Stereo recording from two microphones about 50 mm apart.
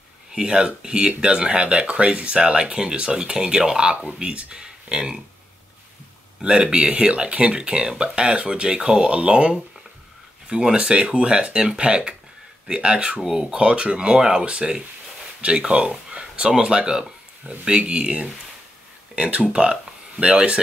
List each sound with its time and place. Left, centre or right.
0.3 s speech: centre
6.4 s speech: centre